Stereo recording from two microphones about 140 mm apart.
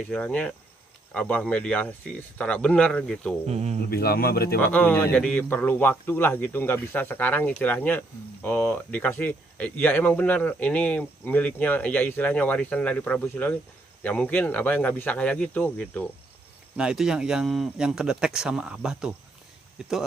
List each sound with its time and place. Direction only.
0.0 s a man's voice: 10° left (ahead or behind)
3.4 s speech: 50° right (ahead or behind)
3.9 s speech: 90° left
4.6 s a man's voice: 10° left (ahead or behind)
16.7 s speech: 5° right (ahead or behind)